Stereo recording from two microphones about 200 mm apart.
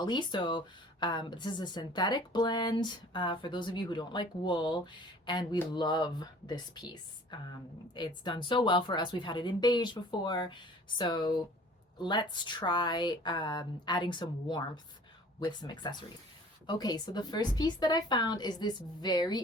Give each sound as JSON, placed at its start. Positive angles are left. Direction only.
{"t": 0.0, "sound": "speech", "side_deg": 20}